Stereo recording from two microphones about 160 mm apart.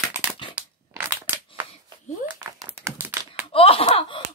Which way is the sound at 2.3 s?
10° right (ahead or behind).